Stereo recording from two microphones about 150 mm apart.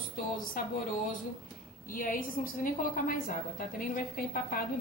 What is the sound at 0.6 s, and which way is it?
Speech, 65° left (ahead or behind).